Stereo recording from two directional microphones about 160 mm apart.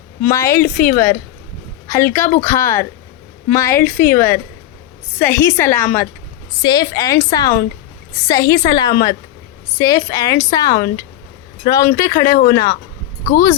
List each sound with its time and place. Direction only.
0.2 s a woman's voice: 15° left (ahead or behind)
6.6 s speech: 25° left (ahead or behind)